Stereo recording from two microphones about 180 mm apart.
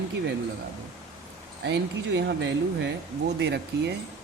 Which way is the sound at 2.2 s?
75° right (ahead or behind).